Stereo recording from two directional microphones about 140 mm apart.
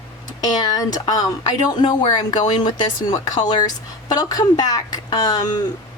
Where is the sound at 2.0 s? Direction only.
55° left (ahead or behind).